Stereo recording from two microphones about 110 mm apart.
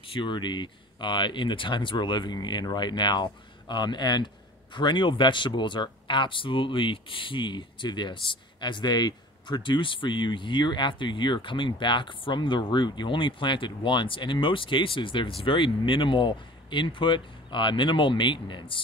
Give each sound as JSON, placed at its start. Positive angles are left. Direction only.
{"t": 0.1, "sound": "speech", "side_deg": 45}